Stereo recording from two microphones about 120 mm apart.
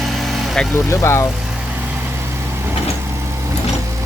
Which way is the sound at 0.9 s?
25° left (ahead or behind).